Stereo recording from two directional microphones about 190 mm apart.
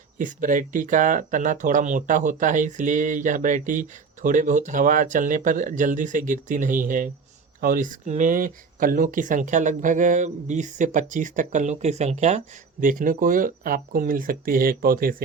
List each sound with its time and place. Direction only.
0.2 s speech: 45° right (ahead or behind)